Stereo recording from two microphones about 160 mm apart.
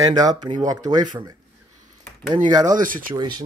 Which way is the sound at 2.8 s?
60° right (ahead or behind).